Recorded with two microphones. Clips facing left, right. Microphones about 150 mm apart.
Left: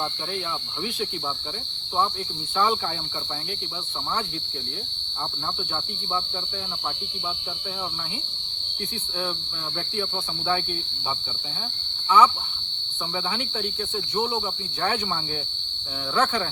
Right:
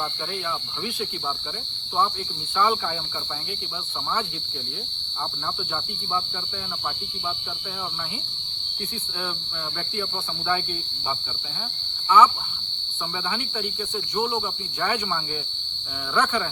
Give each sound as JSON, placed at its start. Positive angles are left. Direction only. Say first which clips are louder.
{"t": 12.0, "sound": "speech", "louder": "right 1 dB", "side_deg": 10}
{"t": 16.1, "sound": "insect", "louder": "even", "side_deg": 30}